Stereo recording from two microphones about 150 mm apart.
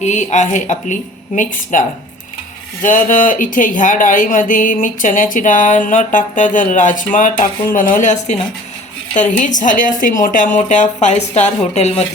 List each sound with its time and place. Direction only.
0.0 s speech: 55° left (ahead or behind)
9.4 s speech: 60° left (ahead or behind)